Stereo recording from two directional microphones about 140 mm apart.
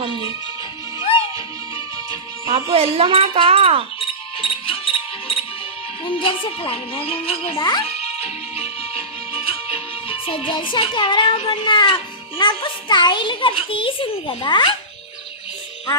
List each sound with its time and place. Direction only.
0.9 s music: 40° left (ahead or behind)
2.7 s speech: 45° right (ahead or behind)
4.0 s music: 40° left (ahead or behind)
6.1 s speech: 40° left (ahead or behind)
7.9 s music: 45° left (ahead or behind)